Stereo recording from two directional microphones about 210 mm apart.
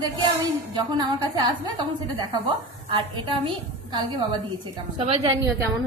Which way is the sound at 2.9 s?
20° right (ahead or behind).